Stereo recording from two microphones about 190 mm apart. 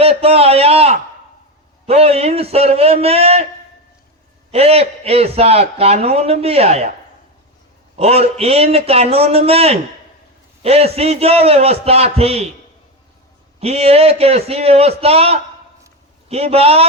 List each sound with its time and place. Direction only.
0.0 s a man's voice: 30° right (ahead or behind)
4.5 s a man's voice: 30° right (ahead or behind)
7.9 s a man's voice: 35° right (ahead or behind)
13.6 s a man's voice: 30° right (ahead or behind)